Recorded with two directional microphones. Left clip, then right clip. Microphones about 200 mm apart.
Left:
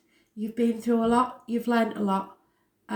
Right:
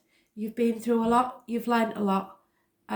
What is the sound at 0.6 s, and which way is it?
A woman's voice, 35° right (ahead or behind).